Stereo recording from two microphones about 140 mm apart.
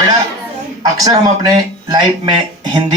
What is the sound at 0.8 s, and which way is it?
Speech, 25° right (ahead or behind).